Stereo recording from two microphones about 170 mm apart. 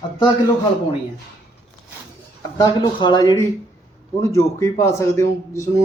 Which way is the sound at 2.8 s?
25° left (ahead or behind).